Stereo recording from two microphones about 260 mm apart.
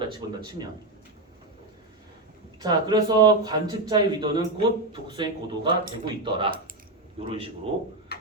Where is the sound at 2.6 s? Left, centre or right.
Centre.